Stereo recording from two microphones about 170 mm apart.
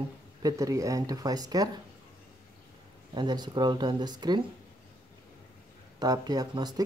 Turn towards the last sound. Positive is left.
turn(degrees=-25)  # may be behind; listen again after turning